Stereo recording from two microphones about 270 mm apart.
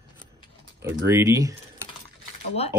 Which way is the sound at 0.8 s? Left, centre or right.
Centre.